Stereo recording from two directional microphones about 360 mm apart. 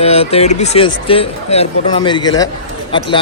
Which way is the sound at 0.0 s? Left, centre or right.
Centre.